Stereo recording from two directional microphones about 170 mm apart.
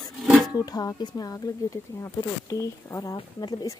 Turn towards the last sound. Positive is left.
turn(degrees=25)  # may be behind; listen again after turning